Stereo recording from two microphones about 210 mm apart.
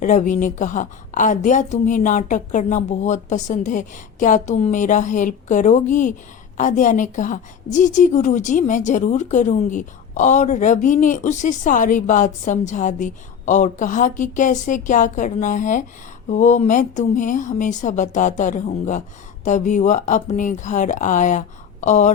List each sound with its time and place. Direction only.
0.0 s a woman's voice: 35° left (ahead or behind)